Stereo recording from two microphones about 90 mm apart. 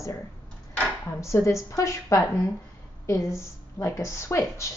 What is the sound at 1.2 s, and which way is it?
Speech, 35° left (ahead or behind).